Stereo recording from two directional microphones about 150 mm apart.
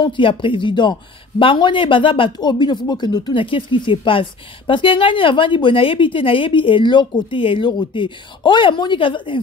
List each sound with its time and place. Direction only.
0.0 s speech: 35° left (ahead or behind)